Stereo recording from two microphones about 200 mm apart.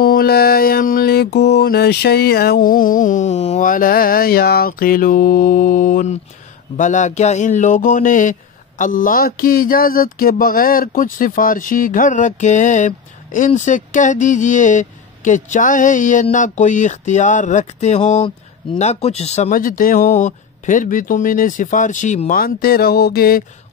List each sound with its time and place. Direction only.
0.0 s mantra: 50° left (ahead or behind)
6.8 s speech: 40° left (ahead or behind)
19.8 s mantra: 45° left (ahead or behind)